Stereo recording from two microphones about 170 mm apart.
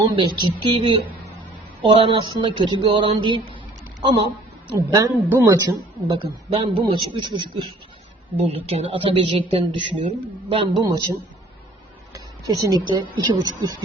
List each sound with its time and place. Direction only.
0.2 s a woman's voice: 25° right (ahead or behind)
4.7 s a woman's voice: 20° right (ahead or behind)
8.4 s a woman's voice: 40° right (ahead or behind)
12.1 s a woman's voice: 20° right (ahead or behind)